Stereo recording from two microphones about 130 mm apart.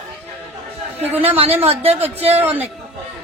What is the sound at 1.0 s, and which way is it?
Speech, 15° right (ahead or behind).